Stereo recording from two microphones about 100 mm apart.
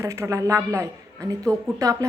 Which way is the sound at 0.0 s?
30° right (ahead or behind).